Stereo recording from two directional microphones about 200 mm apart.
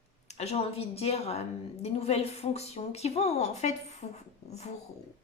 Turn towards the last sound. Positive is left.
turn(degrees=35)  # may be behind; listen again after turning